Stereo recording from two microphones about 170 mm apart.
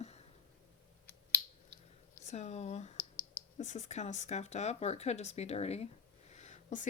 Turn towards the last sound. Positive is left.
turn(degrees=45)  # may be behind; listen again after turning